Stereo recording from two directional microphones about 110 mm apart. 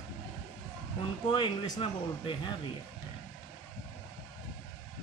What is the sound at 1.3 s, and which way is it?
Speech, 45° left (ahead or behind).